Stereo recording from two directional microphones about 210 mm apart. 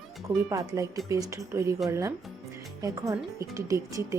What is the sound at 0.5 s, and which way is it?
Speech, 15° right (ahead or behind).